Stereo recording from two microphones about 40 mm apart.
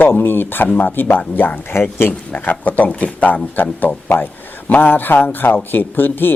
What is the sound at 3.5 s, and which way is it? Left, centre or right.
A man's voice, left.